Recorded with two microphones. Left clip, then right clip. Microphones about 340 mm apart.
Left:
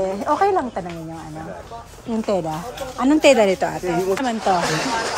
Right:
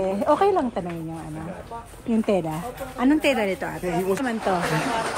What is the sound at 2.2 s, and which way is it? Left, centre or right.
A woman's voice, centre.